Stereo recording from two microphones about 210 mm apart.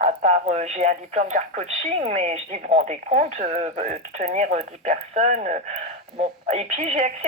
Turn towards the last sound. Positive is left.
turn(degrees=-35)  # may be behind; listen again after turning